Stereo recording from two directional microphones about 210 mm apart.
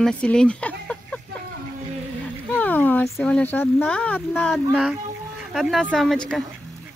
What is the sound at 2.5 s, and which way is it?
Speech, 10° left (ahead or behind).